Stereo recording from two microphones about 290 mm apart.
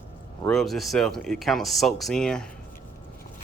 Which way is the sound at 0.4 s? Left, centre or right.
Centre.